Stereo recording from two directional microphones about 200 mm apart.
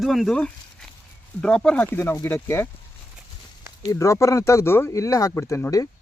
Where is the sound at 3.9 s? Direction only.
15° left (ahead or behind).